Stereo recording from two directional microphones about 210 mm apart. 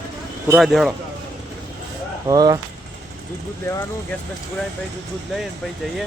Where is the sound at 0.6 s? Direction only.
Centre (ahead or behind).